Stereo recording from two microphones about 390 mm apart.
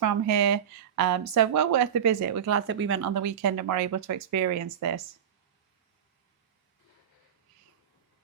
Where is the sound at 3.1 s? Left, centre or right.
Right.